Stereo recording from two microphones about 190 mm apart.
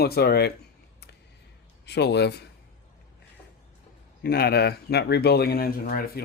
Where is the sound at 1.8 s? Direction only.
65° left (ahead or behind).